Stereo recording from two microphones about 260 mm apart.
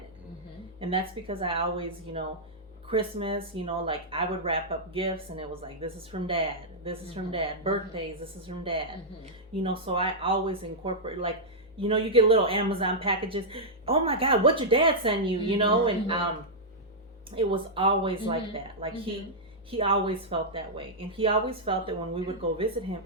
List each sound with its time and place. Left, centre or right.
0.8 s speech: right
17.3 s speech: centre